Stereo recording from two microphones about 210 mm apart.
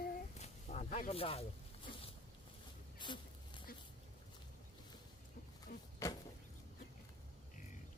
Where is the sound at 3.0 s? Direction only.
20° left (ahead or behind).